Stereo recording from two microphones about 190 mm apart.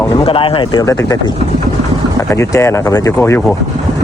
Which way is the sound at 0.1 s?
30° left (ahead or behind).